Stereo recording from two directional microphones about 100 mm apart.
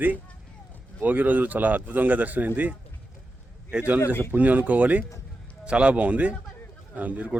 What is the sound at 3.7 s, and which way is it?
Speech, 15° right (ahead or behind).